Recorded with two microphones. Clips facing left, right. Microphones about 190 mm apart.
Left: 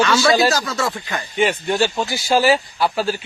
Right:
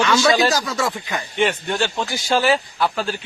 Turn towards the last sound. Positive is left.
turn(degrees=5)  # may be behind; listen again after turning